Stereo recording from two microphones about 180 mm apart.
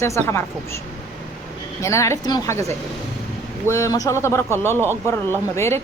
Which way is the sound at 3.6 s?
15° left (ahead or behind).